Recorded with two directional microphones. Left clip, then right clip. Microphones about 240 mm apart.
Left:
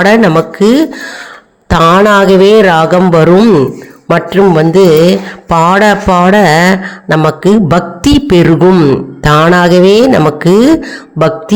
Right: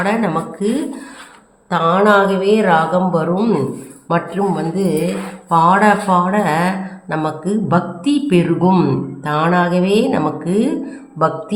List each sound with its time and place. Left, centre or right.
0.0 s mantra: left
1.7 s mantra: left